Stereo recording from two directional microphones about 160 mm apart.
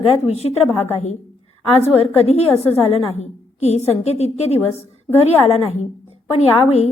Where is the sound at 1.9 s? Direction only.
40° left (ahead or behind).